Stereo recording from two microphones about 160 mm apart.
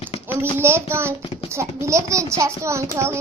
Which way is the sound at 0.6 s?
15° right (ahead or behind).